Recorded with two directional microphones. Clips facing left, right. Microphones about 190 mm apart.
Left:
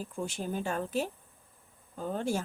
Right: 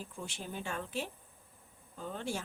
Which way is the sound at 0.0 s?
45° left (ahead or behind).